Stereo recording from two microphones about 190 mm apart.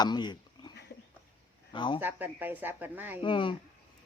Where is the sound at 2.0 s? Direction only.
10° right (ahead or behind).